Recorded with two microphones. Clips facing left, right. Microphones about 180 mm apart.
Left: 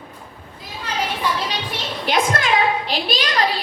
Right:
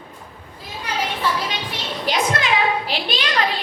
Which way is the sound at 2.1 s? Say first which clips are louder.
Left 1 dB; 55° left (ahead or behind).